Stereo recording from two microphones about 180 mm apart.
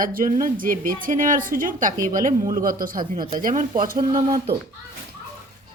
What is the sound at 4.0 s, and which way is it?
Speech, 25° right (ahead or behind).